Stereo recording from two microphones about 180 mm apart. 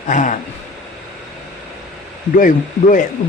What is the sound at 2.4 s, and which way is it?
Speech, 45° left (ahead or behind).